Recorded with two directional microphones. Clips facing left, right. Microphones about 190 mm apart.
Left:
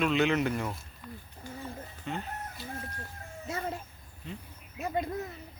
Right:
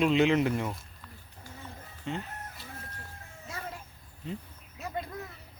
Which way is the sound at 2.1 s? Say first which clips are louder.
Right 1 dB; 25° right (ahead or behind).